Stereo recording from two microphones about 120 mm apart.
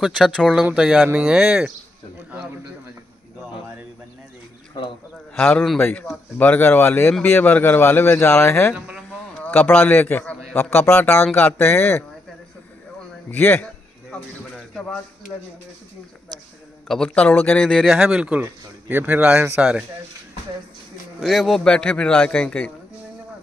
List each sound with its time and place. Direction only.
0.4 s a man's voice: centre (ahead or behind)
5.3 s a man's voice: 10° left (ahead or behind)
8.7 s a man's voice: 10° right (ahead or behind)
9.4 s a man's voice: 15° left (ahead or behind)
13.3 s speech: 15° left (ahead or behind)
16.8 s a man's voice: 5° left (ahead or behind)
21.2 s speech: centre (ahead or behind)